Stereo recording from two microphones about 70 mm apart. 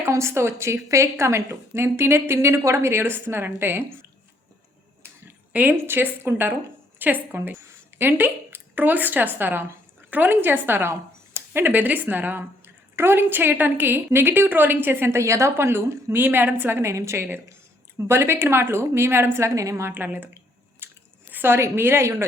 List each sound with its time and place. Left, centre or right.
0.0 s a woman's voice: right
5.7 s a woman's voice: right
19.9 s a woman's voice: right
20.7 s chewing: right